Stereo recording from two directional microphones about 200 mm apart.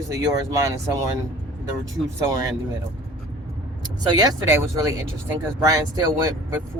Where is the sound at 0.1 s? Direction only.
15° right (ahead or behind).